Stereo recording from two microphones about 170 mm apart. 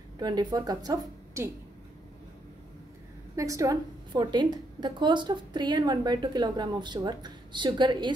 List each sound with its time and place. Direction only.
0.2 s a woman's voice: 25° right (ahead or behind)
3.3 s a woman's voice: 20° right (ahead or behind)